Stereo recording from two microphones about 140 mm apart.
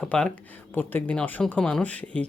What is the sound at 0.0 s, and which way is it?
Speech, 5° left (ahead or behind).